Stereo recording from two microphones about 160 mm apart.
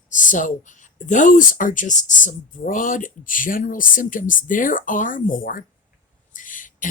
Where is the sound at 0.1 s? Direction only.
55° left (ahead or behind).